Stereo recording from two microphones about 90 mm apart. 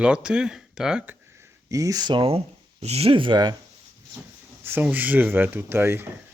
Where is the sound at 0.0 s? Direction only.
10° right (ahead or behind).